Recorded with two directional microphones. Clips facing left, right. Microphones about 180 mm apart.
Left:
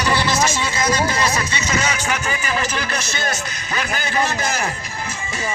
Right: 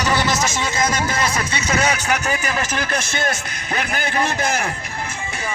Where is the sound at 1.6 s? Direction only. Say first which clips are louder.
Right 4 dB; 60° right (ahead or behind).